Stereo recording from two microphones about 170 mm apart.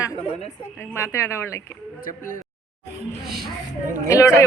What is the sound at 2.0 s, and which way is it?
Speech, 55° left (ahead or behind).